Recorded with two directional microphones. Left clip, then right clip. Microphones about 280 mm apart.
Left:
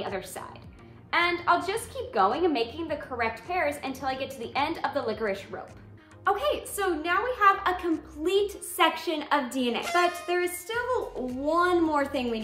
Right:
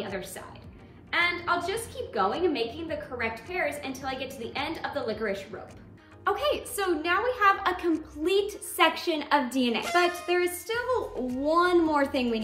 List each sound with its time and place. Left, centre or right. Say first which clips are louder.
1.1 s a woman's voice: left 2 dB; centre
6.2 s a woman's voice: left 1 dB; centre